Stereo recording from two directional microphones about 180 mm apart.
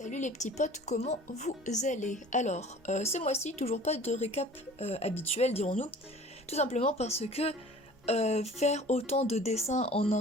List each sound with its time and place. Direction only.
0.0 s speech: 45° left (ahead or behind)